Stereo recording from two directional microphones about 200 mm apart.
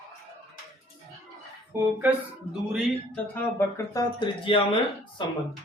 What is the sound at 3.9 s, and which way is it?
Speech, 25° left (ahead or behind).